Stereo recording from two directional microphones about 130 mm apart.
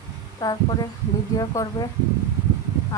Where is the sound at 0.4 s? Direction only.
25° left (ahead or behind).